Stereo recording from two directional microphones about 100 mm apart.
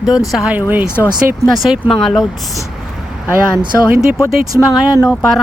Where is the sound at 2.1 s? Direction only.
Centre (ahead or behind).